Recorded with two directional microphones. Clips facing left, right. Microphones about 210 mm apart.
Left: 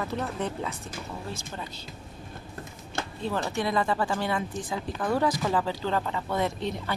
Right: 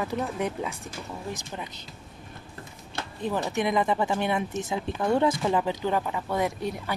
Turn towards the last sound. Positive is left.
turn(degrees=-10)  # may be behind; listen again after turning